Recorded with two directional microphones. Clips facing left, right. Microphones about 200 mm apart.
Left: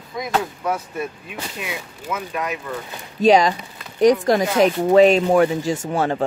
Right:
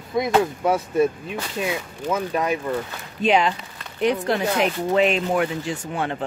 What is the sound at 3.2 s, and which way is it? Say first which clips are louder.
Speech: left 5 dB; 40° left (ahead or behind).